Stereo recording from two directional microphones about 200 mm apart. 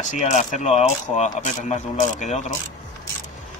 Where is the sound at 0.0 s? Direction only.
35° left (ahead or behind).